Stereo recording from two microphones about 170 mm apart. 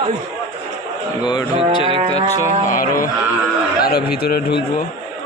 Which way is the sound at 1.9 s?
30° right (ahead or behind).